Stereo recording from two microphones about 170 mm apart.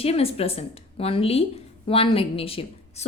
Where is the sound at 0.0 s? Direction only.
35° left (ahead or behind).